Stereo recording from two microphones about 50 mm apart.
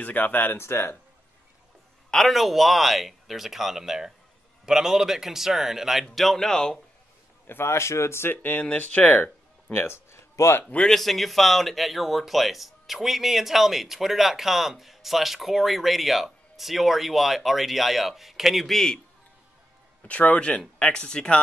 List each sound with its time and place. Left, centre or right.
0.0 s speech: left
0.6 s speech: left
2.0 s a man's voice: centre
6.1 s speech: centre
7.4 s speech: left
9.7 s a sound: left
10.9 s speech: centre
20.0 s speech: left